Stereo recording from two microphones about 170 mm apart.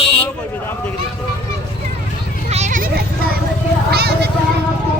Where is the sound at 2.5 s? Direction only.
45° right (ahead or behind).